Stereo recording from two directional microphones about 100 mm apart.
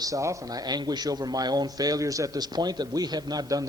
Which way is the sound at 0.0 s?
30° right (ahead or behind).